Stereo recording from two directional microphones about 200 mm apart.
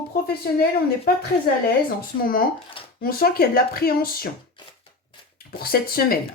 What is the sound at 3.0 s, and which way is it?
Speech, 50° left (ahead or behind).